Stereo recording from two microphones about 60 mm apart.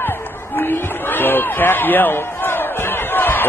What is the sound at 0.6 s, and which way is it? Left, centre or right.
Speech, left.